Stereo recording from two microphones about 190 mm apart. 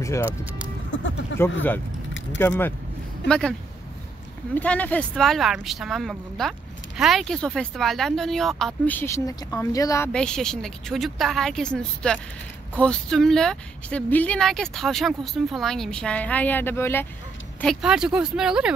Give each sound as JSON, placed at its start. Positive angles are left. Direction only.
{"t": 0.9, "sound": "speech", "side_deg": 80}
{"t": 2.3, "sound": "speech", "side_deg": 10}
{"t": 4.6, "sound": "speech", "side_deg": 10}
{"t": 17.8, "sound": "speech", "side_deg": -5}